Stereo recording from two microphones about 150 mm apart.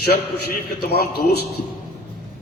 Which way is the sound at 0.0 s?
90° left.